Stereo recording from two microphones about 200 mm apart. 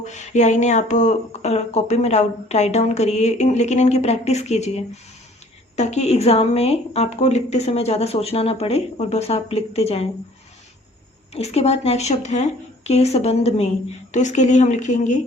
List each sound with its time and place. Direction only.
0.0 s speech: 35° left (ahead or behind)
11.3 s speech: 30° left (ahead or behind)